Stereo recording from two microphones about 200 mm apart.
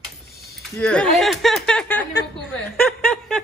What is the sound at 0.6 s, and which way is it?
Speech, 5° left (ahead or behind).